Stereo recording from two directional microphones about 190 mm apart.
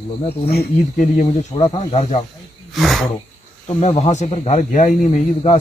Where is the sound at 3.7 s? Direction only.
35° left (ahead or behind).